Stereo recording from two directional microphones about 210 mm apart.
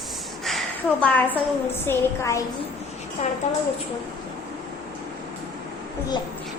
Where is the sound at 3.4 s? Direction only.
35° left (ahead or behind).